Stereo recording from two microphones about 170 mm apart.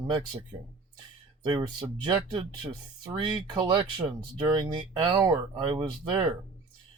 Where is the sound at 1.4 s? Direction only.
25° right (ahead or behind).